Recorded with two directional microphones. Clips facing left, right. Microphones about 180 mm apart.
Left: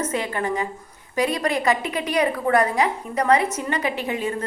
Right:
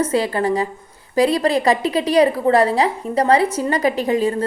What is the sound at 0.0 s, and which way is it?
A woman's voice, 35° right (ahead or behind).